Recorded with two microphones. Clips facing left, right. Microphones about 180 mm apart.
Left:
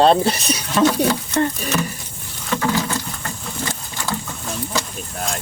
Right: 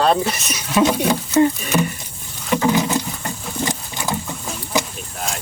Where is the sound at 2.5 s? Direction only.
20° right (ahead or behind).